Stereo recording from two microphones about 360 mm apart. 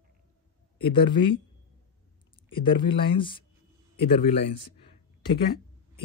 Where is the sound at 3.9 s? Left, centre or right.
Left.